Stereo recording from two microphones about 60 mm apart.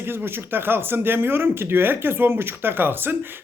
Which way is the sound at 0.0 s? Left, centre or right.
Right.